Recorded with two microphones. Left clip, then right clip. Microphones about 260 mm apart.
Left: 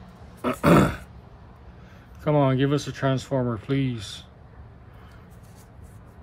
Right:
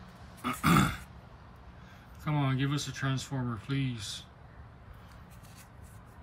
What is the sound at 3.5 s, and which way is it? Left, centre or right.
Speech, centre.